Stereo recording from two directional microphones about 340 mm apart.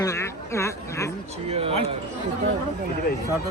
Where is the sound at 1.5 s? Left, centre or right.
Centre.